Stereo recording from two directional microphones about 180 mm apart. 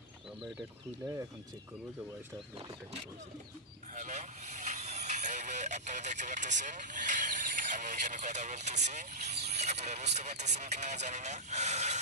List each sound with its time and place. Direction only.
3.9 s speech: 40° right (ahead or behind)